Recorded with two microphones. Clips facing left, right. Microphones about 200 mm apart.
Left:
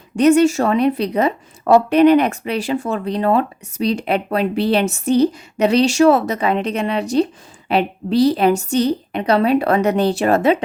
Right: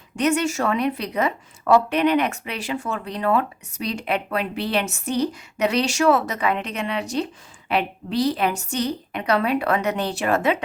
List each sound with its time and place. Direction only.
0.2 s a woman's voice: 30° left (ahead or behind)